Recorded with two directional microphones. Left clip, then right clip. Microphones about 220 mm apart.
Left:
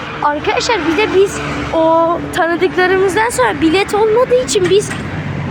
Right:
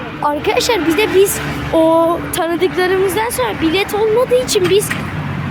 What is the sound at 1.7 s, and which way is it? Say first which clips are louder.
Speech: even; 25° right (ahead or behind).